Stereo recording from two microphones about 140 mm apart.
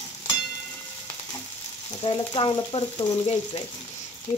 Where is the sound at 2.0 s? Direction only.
35° left (ahead or behind).